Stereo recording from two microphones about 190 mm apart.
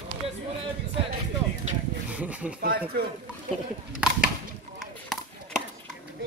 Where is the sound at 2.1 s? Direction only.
10° right (ahead or behind).